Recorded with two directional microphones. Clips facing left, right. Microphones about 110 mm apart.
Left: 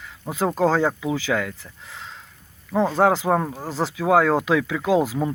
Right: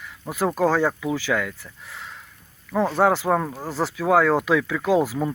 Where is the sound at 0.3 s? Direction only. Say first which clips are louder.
Left 1 dB; 25° left (ahead or behind).